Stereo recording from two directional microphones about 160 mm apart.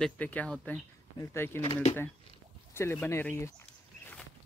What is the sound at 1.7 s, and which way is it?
Speech, 40° left (ahead or behind).